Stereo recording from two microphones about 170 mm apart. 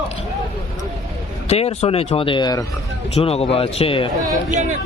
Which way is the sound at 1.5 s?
40° left (ahead or behind).